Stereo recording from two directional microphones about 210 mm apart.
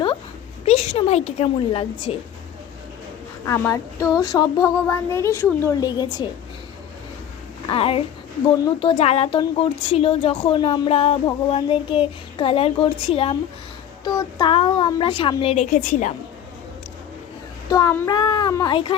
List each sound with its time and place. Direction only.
0.6 s speech: 30° left (ahead or behind)
3.4 s speech: 15° left (ahead or behind)
7.7 s speech: 25° left (ahead or behind)
17.7 s speech: 15° left (ahead or behind)